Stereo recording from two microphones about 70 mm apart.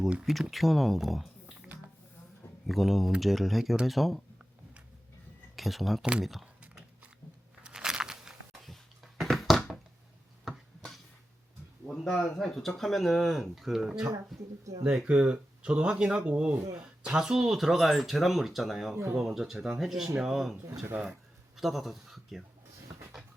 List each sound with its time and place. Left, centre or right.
0.5 s speech: centre
2.6 s speech: centre
5.5 s speech: centre
6.4 s a sound: centre
8.6 s a sound: centre
11.9 s speech: centre
14.8 s speech: centre
20.9 s speech: right
21.5 s speech: centre